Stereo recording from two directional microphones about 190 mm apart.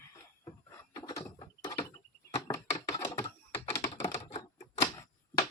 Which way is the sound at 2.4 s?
20° left (ahead or behind).